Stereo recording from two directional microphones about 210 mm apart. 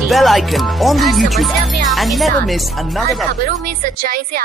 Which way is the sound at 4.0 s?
45° right (ahead or behind).